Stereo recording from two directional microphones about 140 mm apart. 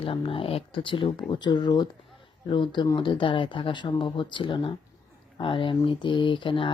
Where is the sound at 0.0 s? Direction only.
40° left (ahead or behind).